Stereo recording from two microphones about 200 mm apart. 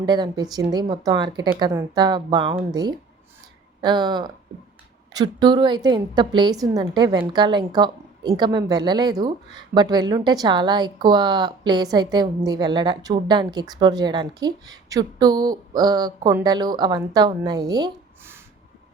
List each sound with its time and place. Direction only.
0.0 s a woman's voice: 20° right (ahead or behind)